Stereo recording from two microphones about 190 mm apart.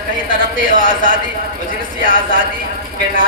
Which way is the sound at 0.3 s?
45° right (ahead or behind).